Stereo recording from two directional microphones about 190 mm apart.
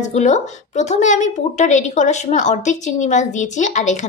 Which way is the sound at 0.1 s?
40° left (ahead or behind).